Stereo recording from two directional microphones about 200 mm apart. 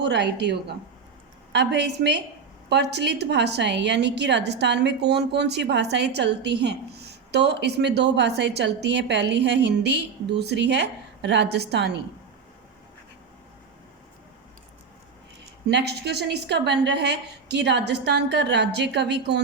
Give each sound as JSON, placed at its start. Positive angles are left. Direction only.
{"t": 0.0, "sound": "a woman's voice", "side_deg": -55}
{"t": 1.5, "sound": "a woman's voice", "side_deg": -55}
{"t": 15.7, "sound": "a woman's voice", "side_deg": -55}